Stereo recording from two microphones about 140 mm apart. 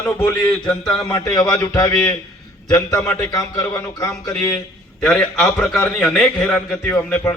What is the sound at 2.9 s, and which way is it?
A man's voice, 10° left (ahead or behind).